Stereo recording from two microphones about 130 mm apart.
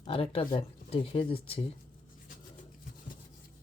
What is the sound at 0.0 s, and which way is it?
Speech, 45° left (ahead or behind).